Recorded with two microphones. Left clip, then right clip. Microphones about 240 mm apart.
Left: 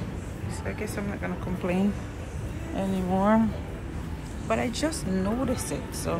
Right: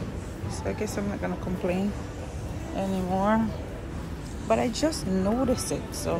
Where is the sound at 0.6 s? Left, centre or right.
Centre.